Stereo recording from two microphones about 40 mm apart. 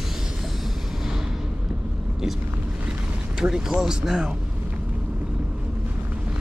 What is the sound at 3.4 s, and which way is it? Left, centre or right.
Speech, right.